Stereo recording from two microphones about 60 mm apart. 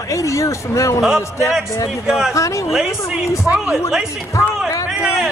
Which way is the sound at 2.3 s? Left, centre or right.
Left.